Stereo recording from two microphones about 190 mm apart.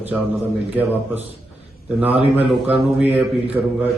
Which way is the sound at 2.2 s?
30° left (ahead or behind).